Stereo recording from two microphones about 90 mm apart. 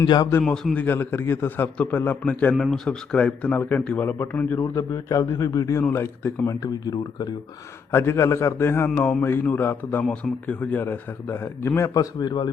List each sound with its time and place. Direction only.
0.0 s speech: 50° left (ahead or behind)
0.4 s speech: 10° left (ahead or behind)
2.6 s speech: 5° left (ahead or behind); by 4.6 s 20° left (ahead or behind)
4.6 s a man's voice: 30° left (ahead or behind)
5.9 s speech: 25° left (ahead or behind)
6.6 s speech: 50° left (ahead or behind)
7.9 s speech: 30° left (ahead or behind)
11.9 s speech: 50° left (ahead or behind)